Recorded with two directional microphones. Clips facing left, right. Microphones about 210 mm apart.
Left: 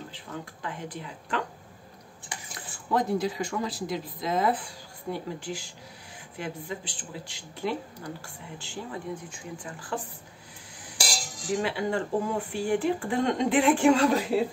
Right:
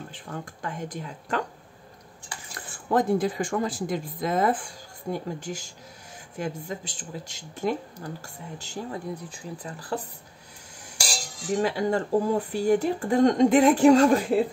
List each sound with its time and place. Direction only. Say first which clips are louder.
0.1 s speech: right 2 dB; 45° right (ahead or behind)
2.9 s speech: right 4 dB; 50° right (ahead or behind)
11.5 s speech: right 3 dB; 40° right (ahead or behind)